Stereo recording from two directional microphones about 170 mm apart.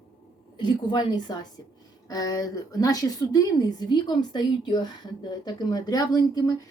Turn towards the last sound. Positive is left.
turn(degrees=25)  # may be behind; listen again after turning